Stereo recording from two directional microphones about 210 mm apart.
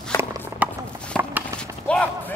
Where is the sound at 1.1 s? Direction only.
5° left (ahead or behind).